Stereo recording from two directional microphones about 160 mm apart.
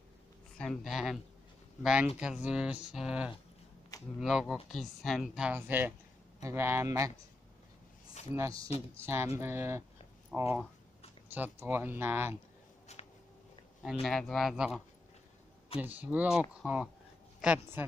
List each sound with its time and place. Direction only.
0.6 s speech: centre (ahead or behind); by 7.1 s 20° right (ahead or behind)
8.3 s speech: 15° right (ahead or behind)
12.9 s a sound: 45° left (ahead or behind)
14.0 s speech: centre (ahead or behind)
15.8 s speech: 10° right (ahead or behind)